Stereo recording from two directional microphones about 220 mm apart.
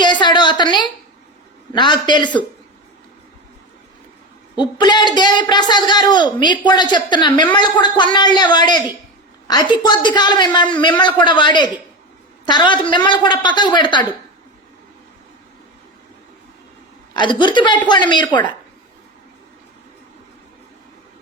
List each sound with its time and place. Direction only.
0.0 s a sound: 20° left (ahead or behind)
1.7 s a woman's voice: 20° left (ahead or behind)
4.5 s a woman's voice: 20° left (ahead or behind)
17.2 s a woman's voice: 20° left (ahead or behind)